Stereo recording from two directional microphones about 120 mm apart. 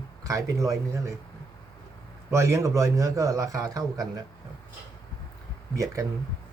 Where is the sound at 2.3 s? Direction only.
25° right (ahead or behind).